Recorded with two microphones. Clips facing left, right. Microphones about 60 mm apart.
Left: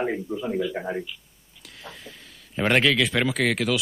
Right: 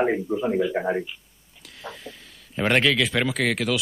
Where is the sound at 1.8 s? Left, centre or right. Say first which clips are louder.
Right 4 dB; centre.